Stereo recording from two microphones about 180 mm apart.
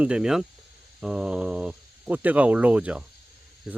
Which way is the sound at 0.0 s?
5° right (ahead or behind).